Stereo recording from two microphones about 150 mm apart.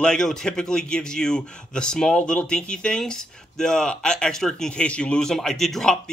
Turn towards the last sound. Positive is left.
turn(degrees=5)  # may be behind; listen again after turning